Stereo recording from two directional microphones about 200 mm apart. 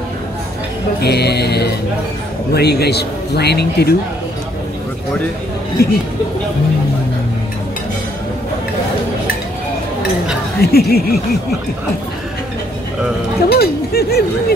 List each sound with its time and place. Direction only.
1.0 s music: 55° left (ahead or behind)
2.5 s speech: 55° left (ahead or behind)
5.8 s speech: 50° left (ahead or behind)
10.6 s speech: 50° left (ahead or behind)
13.5 s speech: 50° left (ahead or behind)